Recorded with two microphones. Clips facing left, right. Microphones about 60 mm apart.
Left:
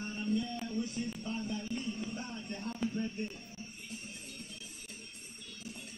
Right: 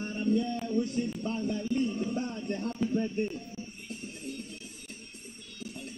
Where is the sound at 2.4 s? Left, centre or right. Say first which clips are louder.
Right 8 dB; right.